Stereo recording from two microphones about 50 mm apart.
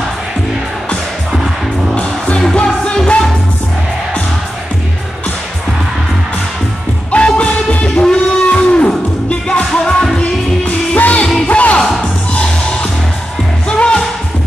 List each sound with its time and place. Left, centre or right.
2.0 s music: left
7.1 s music: left
9.7 s music: centre
11.0 s music: left